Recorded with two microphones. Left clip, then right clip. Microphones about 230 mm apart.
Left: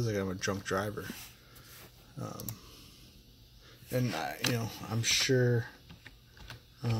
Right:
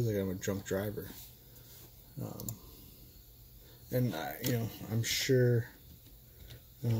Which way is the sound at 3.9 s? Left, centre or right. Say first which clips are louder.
Left 2 dB; centre.